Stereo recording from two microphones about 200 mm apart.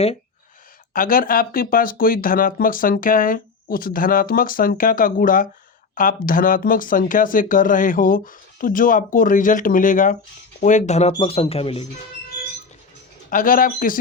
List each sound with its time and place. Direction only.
0.9 s speech: 45° left (ahead or behind); by 11.9 s 30° left (ahead or behind)
13.3 s speech: 45° left (ahead or behind)